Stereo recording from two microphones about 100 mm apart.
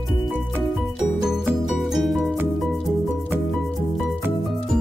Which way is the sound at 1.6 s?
Centre (ahead or behind).